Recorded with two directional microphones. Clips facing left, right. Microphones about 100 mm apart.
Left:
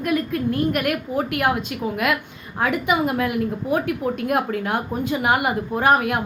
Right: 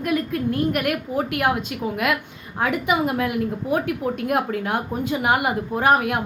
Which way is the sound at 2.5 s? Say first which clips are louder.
Left 1 dB; 10° right (ahead or behind).